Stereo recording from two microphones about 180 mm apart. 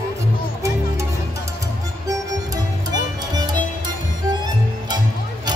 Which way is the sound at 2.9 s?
20° right (ahead or behind).